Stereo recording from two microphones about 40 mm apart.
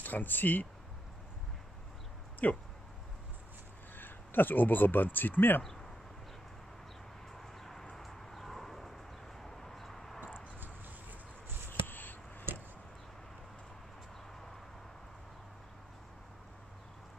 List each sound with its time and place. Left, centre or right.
0.0 s speech: left
2.4 s speech: left
3.9 s speech: left
5.6 s speech: centre
7.3 s a sound: centre
9.4 s vehicle: centre
11.8 s chop: left
12.5 s chop: right